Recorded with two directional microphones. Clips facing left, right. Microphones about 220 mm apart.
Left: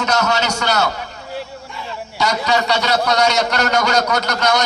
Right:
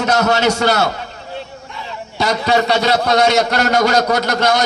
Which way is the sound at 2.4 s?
50° right (ahead or behind).